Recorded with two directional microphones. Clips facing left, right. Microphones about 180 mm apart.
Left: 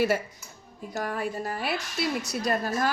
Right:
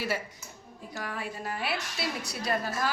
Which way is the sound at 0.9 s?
45° left (ahead or behind).